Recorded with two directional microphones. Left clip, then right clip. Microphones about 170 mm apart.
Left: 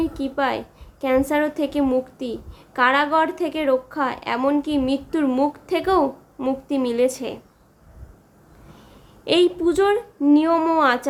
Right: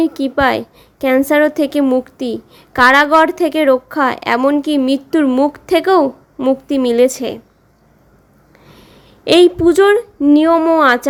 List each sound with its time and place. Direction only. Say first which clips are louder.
0.0 s a woman's voice: right 9 dB; 40° right (ahead or behind)
9.2 s a woman's voice: right 9 dB; 40° right (ahead or behind)